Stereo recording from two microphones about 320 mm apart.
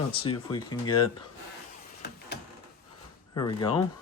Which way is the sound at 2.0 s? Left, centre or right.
Left.